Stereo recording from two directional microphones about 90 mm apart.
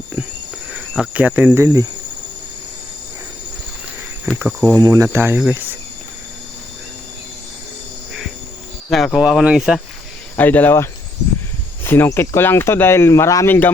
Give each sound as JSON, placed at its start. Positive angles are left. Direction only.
{"t": 0.9, "sound": "speech", "side_deg": -15}
{"t": 4.6, "sound": "speech", "side_deg": -45}
{"t": 5.1, "sound": "speech", "side_deg": -25}
{"t": 5.4, "sound": "speech", "side_deg": -15}
{"t": 8.9, "sound": "speech", "side_deg": 5}
{"t": 9.1, "sound": "speech", "side_deg": -5}
{"t": 10.3, "sound": "speech", "side_deg": 20}
{"t": 11.9, "sound": "speech", "side_deg": 25}